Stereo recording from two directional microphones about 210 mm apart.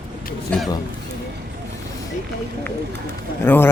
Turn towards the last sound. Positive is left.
turn(degrees=10)  # may be behind; listen again after turning